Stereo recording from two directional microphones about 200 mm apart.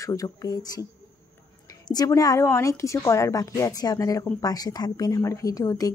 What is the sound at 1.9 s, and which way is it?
A woman's voice, 20° left (ahead or behind).